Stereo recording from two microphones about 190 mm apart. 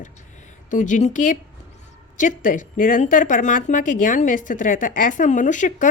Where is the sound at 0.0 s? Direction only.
40° left (ahead or behind).